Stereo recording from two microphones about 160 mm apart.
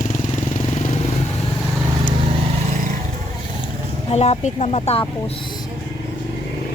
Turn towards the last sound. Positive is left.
turn(degrees=40)  # may be behind; listen again after turning